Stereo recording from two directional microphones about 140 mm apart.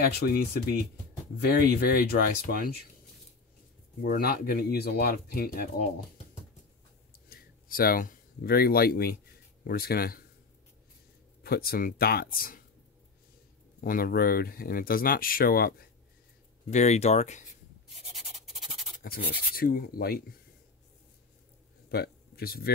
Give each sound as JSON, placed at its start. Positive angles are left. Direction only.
{"t": 0.0, "sound": "speech", "side_deg": 90}
{"t": 4.0, "sound": "speech", "side_deg": 85}
{"t": 7.1, "sound": "a sound", "side_deg": 90}
{"t": 9.7, "sound": "speech", "side_deg": 90}
{"t": 11.4, "sound": "speech", "side_deg": 90}
{"t": 13.7, "sound": "speech", "side_deg": 90}
{"t": 16.7, "sound": "speech", "side_deg": 55}
{"t": 18.1, "sound": "a sound", "side_deg": 0}
{"t": 19.1, "sound": "speech", "side_deg": 90}
{"t": 21.9, "sound": "a sound", "side_deg": 90}